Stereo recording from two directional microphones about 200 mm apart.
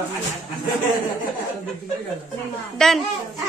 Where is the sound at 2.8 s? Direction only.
5° left (ahead or behind).